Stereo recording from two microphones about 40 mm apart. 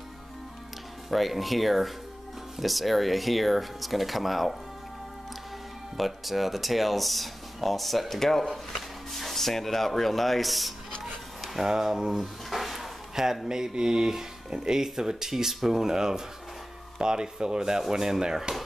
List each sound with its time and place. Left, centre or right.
1.1 s speech: centre
5.9 s speech: centre
11.6 s speech: centre